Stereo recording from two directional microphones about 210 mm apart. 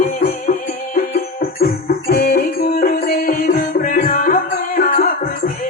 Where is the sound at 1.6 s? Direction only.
45° left (ahead or behind).